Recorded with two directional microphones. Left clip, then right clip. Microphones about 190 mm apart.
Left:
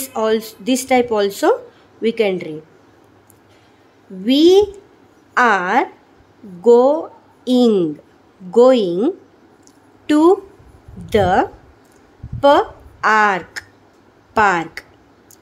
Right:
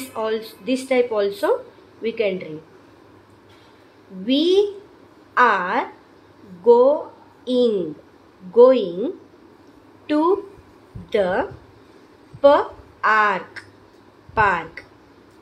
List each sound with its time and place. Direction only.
0.1 s speech: 60° left (ahead or behind)
4.3 s a woman's voice: 65° left (ahead or behind)